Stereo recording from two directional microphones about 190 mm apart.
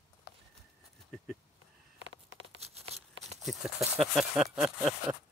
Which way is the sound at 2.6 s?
35° right (ahead or behind).